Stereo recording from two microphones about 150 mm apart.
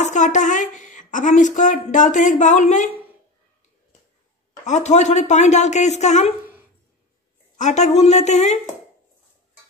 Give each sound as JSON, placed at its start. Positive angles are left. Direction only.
{"t": 0.0, "sound": "speech", "side_deg": 55}
{"t": 4.6, "sound": "speech", "side_deg": 50}
{"t": 7.5, "sound": "speech", "side_deg": 50}